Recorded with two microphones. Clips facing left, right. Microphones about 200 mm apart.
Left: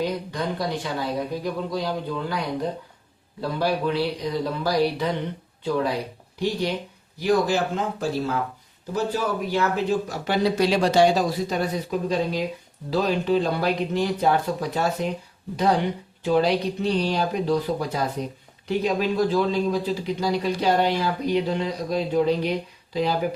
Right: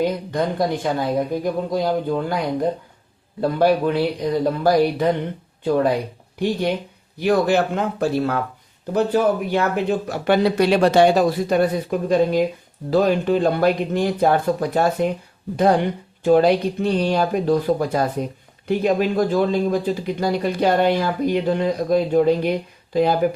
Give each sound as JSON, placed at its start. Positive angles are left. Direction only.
{"t": 0.0, "sound": "speech", "side_deg": -50}
{"t": 3.6, "sound": "speech", "side_deg": -50}
{"t": 16.2, "sound": "speech", "side_deg": -50}